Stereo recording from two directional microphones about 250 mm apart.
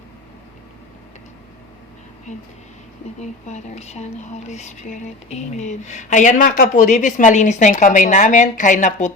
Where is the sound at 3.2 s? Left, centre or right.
Left.